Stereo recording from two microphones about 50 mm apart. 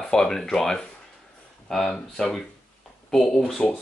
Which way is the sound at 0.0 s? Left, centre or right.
Centre.